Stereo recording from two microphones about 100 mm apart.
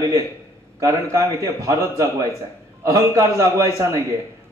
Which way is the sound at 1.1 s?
30° right (ahead or behind).